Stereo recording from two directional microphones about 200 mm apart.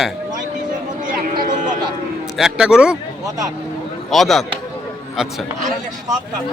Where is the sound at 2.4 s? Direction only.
5° right (ahead or behind).